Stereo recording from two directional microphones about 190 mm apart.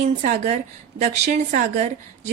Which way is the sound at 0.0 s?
40° right (ahead or behind).